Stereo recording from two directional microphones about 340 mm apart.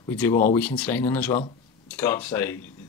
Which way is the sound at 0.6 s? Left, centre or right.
Centre.